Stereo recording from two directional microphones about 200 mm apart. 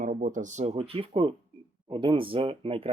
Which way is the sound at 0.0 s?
40° right (ahead or behind).